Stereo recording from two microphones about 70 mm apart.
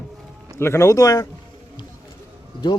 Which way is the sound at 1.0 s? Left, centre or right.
Left.